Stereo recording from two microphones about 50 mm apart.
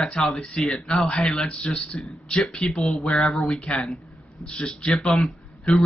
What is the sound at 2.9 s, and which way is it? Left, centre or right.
A man's voice, centre.